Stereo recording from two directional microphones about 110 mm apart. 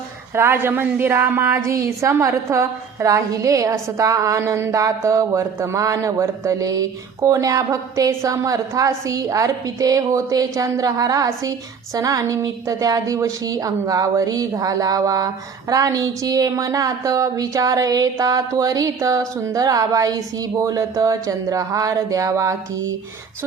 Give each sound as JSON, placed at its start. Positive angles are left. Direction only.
{"t": 0.3, "sound": "a woman's voice", "side_deg": -20}